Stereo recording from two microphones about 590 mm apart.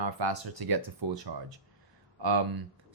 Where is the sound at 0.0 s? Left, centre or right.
Right.